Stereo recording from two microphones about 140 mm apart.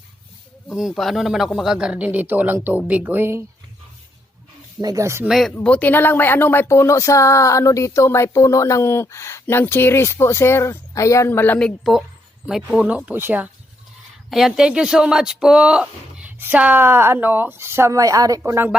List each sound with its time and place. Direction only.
0.7 s speech: centre (ahead or behind); by 3.4 s 15° right (ahead or behind)
4.8 s speech: 25° right (ahead or behind)
5.2 s speech: centre (ahead or behind)
5.6 s speech: 10° left (ahead or behind)
11.8 s speech: centre (ahead or behind)
14.3 s speech: centre (ahead or behind); by 18.7 s 20° right (ahead or behind)